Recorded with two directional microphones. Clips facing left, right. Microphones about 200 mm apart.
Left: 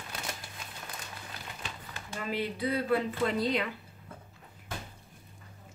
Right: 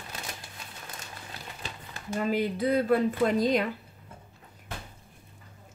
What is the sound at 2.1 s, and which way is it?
Speech, 45° right (ahead or behind).